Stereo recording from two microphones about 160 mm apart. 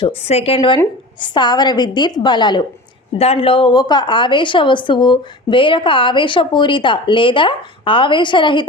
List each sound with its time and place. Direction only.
0.0 s a woman's voice: 40° left (ahead or behind)